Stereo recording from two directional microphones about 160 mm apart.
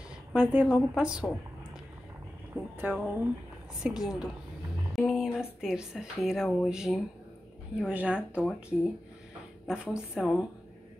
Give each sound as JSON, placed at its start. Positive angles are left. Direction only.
{"t": 0.3, "sound": "a woman's voice", "side_deg": -10}
{"t": 2.5, "sound": "a woman's voice", "side_deg": -10}
{"t": 9.7, "sound": "a woman's voice", "side_deg": -5}